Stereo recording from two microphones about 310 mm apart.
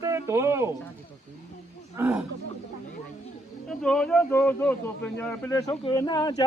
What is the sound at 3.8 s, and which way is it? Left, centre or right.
A man's voice, centre.